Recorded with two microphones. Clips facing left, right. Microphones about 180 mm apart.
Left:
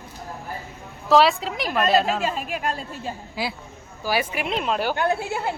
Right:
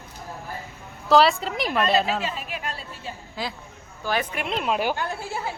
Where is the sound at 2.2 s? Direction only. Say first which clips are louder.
Left 5 dB; 45° left (ahead or behind).